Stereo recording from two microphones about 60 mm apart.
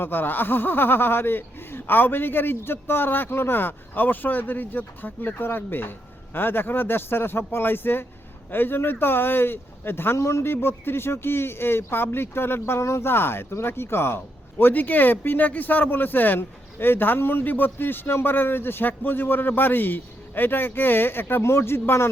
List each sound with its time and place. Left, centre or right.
0.0 s speech: left
14.6 s speech: left